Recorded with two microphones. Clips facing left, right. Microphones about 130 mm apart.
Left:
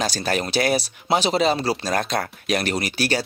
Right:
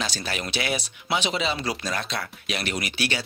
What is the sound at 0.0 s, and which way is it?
Speech, 45° left (ahead or behind).